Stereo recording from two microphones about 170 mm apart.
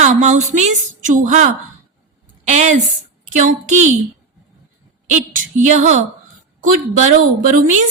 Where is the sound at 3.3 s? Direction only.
45° right (ahead or behind).